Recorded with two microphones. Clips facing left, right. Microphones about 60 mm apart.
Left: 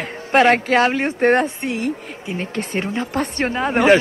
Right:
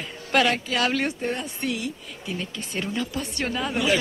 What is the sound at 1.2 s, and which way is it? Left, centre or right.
Speech, left.